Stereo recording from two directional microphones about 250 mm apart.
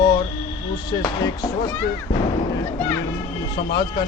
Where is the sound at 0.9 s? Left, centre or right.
Centre.